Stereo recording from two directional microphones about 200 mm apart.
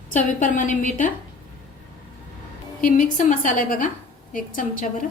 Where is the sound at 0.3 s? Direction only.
40° left (ahead or behind).